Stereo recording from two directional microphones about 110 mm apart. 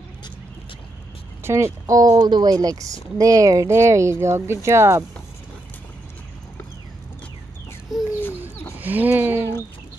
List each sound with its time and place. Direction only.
1.4 s speech: 25° right (ahead or behind)
8.7 s speech: 15° right (ahead or behind)